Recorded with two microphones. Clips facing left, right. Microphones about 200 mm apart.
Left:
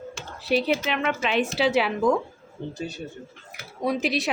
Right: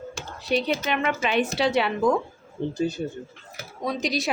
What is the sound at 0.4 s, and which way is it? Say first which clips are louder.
A woman's voice: left 1 dB; 5° left (ahead or behind).